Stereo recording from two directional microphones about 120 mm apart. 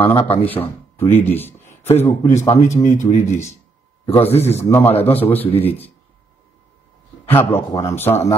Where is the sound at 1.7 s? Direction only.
65° left (ahead or behind).